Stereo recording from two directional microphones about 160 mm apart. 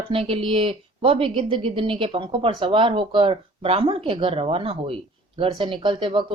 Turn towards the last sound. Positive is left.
turn(degrees=-35)  # may be behind; listen again after turning